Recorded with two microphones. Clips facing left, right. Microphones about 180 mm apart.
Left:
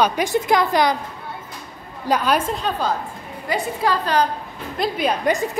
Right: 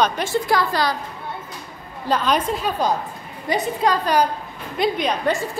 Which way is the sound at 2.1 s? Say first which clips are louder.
Left 1 dB; 10° left (ahead or behind).